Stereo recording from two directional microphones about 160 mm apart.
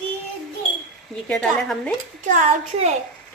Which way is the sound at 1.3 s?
5° left (ahead or behind).